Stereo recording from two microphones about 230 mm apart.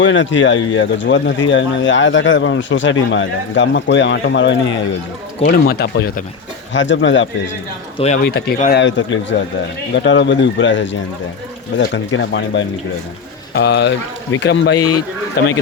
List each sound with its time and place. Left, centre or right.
0.0 s speech: left
5.4 s speech: left
7.9 s speech: left
8.2 s speech: left
8.8 s speech: left
14.8 s a man's voice: centre